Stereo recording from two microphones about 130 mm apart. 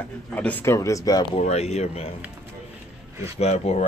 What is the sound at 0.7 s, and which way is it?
Speech, 25° left (ahead or behind).